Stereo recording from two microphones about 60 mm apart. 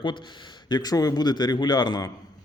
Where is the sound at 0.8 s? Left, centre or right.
Left.